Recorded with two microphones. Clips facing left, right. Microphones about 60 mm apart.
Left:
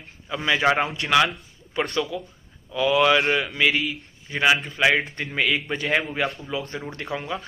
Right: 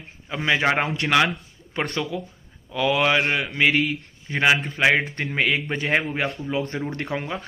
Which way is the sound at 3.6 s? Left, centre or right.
Right.